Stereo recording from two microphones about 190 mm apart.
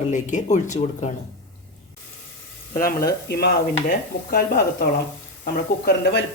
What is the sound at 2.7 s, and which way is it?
Speech, 50° left (ahead or behind).